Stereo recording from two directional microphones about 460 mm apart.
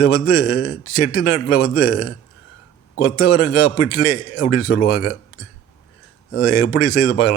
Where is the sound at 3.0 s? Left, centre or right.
Left.